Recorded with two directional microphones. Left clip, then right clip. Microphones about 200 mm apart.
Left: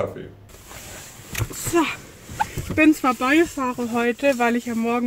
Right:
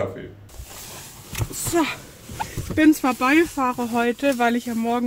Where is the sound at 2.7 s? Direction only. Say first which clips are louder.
Even; 15° right (ahead or behind).